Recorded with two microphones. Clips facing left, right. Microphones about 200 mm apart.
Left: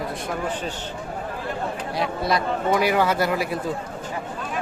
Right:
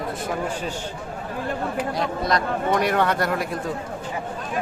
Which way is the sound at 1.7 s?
Centre (ahead or behind).